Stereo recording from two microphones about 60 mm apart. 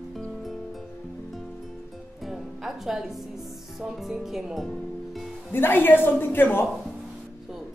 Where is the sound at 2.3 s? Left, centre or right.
Centre.